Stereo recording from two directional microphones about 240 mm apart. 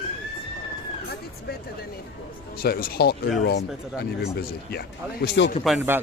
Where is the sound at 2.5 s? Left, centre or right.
Left.